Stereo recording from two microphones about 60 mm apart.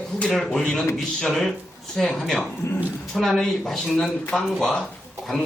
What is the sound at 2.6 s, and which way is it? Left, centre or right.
Speech, left.